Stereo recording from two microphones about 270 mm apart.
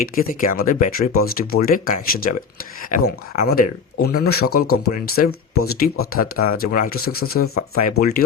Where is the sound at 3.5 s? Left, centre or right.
Left.